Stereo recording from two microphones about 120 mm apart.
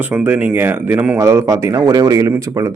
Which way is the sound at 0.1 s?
15° right (ahead or behind).